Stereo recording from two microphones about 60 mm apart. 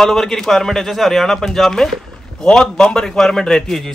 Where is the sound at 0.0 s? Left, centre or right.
Centre.